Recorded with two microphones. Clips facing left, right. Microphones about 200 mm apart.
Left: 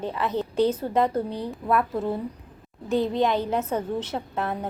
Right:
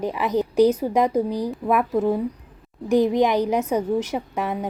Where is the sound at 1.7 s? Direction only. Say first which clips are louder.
Right 4 dB; 15° right (ahead or behind).